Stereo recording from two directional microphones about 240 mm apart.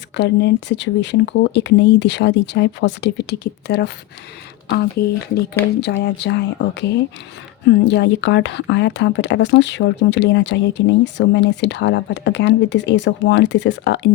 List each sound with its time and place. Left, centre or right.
0.2 s speech: left